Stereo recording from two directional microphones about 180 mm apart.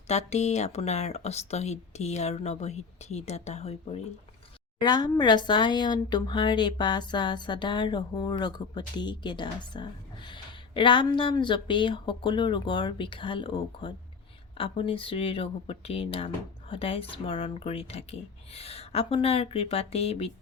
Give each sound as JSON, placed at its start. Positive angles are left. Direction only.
{"t": 0.1, "sound": "speech", "side_deg": 40}
{"t": 4.8, "sound": "speech", "side_deg": 25}